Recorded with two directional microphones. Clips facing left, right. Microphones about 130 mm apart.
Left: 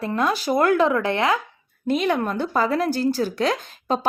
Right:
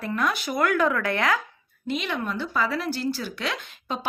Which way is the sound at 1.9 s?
45° left (ahead or behind).